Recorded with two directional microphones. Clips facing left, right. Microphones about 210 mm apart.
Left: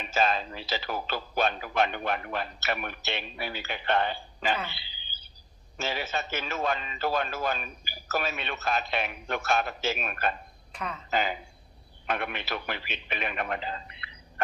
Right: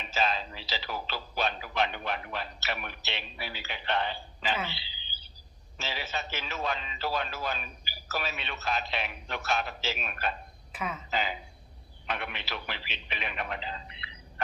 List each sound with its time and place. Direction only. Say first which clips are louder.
0.1 s a man's voice: left 4 dB; 50° left (ahead or behind)
4.7 s a sound: right 3 dB; 50° left (ahead or behind)
5.7 s a man's voice: left 5 dB; 50° left (ahead or behind)
10.7 s speech: right 1 dB; 5° right (ahead or behind)
11.1 s a man's voice: left 8 dB; 50° left (ahead or behind)